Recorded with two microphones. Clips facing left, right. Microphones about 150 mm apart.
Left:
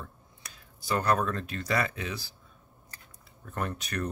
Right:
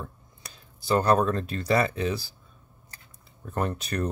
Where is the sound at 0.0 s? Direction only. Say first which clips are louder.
Right 5 dB; 30° right (ahead or behind).